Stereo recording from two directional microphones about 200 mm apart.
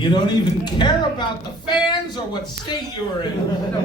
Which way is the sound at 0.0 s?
20° left (ahead or behind).